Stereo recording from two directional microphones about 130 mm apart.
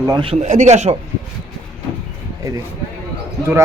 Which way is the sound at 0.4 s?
65° right (ahead or behind).